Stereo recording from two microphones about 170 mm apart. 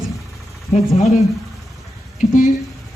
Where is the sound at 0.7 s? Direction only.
40° left (ahead or behind).